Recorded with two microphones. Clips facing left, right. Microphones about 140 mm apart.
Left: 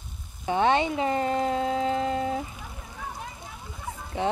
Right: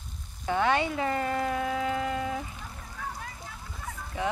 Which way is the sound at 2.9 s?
20° left (ahead or behind).